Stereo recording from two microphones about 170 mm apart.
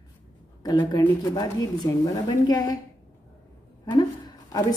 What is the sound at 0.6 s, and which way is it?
Speech, 25° left (ahead or behind).